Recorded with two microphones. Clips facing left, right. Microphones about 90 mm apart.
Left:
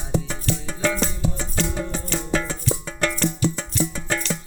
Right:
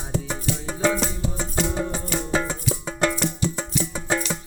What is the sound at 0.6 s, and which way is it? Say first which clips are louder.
Music: right 2 dB; 20° right (ahead or behind).